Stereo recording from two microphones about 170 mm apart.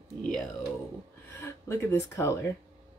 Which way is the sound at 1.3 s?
15° left (ahead or behind).